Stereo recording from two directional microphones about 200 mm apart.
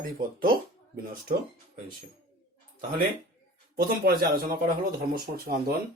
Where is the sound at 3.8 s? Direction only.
45° right (ahead or behind).